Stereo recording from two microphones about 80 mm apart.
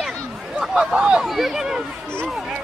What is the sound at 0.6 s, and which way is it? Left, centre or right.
Speech, centre.